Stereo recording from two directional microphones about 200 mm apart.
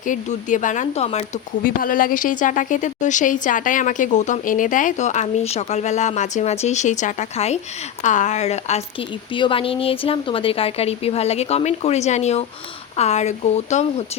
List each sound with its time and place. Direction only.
0.0 s speech: 40° left (ahead or behind)